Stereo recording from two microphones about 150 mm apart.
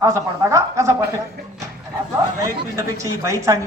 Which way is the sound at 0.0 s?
20° right (ahead or behind).